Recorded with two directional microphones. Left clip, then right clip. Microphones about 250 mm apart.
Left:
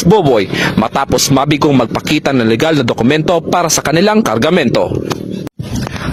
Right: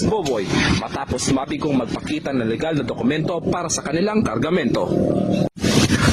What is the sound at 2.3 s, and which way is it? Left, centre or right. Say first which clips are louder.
A man's voice: left 10 dB; left.